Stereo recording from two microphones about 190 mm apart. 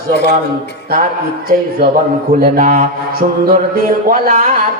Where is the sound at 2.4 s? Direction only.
45° right (ahead or behind).